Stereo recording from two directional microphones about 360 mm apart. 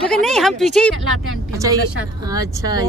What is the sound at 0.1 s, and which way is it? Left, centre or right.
Speech, centre.